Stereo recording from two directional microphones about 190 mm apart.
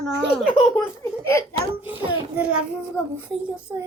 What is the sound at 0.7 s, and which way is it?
Speech, 10° left (ahead or behind).